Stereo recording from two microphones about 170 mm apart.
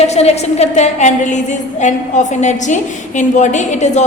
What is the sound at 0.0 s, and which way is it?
A woman's voice, 40° left (ahead or behind).